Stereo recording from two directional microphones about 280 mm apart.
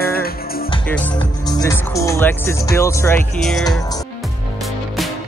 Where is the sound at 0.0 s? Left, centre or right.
Left.